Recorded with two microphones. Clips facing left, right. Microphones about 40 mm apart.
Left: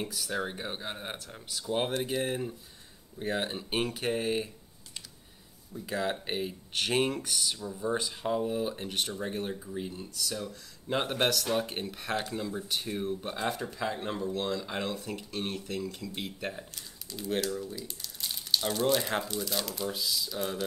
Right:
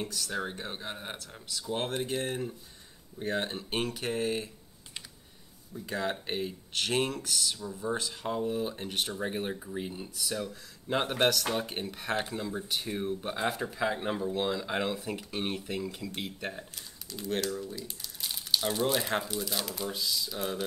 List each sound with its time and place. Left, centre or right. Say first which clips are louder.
0.0 s speech: left 1 dB; centre
5.7 s speech: left 1 dB; centre
9.1 s speech: right 1 dB; centre
10.9 s speech: right 1 dB; centre
16.2 s speech: left 2 dB; centre